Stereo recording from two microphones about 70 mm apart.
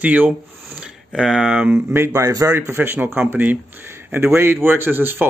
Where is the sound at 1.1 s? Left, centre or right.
Centre.